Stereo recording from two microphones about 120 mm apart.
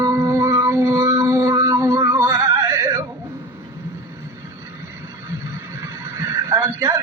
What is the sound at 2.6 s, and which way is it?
Music, 20° right (ahead or behind).